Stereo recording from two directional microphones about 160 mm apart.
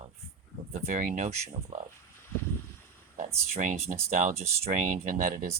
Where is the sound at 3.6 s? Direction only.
45° right (ahead or behind).